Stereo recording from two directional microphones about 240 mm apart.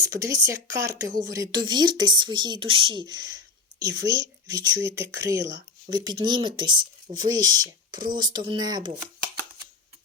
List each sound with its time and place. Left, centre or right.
0.0 s speech: centre